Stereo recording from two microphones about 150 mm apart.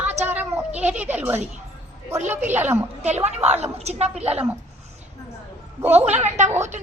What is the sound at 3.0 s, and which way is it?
A woman's voice, 50° right (ahead or behind).